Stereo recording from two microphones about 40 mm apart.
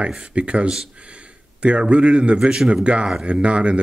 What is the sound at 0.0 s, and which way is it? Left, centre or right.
A man's voice, right.